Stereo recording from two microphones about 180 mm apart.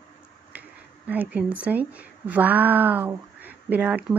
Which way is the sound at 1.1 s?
10° right (ahead or behind).